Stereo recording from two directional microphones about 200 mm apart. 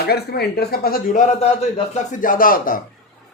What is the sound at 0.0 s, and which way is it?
Speech, 55° left (ahead or behind).